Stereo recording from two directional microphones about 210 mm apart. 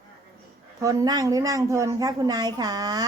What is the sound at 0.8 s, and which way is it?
A woman's voice, 15° right (ahead or behind).